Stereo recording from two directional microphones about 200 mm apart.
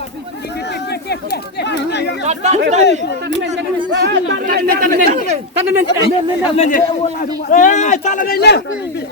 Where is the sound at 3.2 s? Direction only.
60° right (ahead or behind).